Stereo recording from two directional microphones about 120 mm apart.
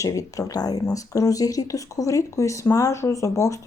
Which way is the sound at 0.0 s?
25° left (ahead or behind).